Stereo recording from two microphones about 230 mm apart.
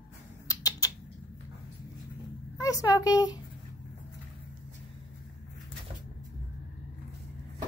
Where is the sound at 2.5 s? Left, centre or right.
Centre.